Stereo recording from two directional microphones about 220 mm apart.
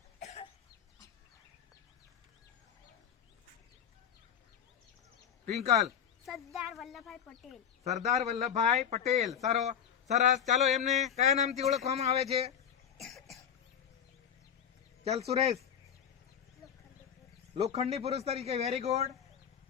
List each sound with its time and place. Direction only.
0.2 s cough: 30° left (ahead or behind)
6.2 s speech: centre (ahead or behind)
7.9 s a man's voice: 30° right (ahead or behind)
13.0 s cough: centre (ahead or behind)
15.3 s a man's voice: 30° right (ahead or behind)
17.5 s a man's voice: 25° right (ahead or behind)